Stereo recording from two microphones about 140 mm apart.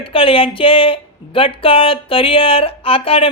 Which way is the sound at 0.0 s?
40° left (ahead or behind).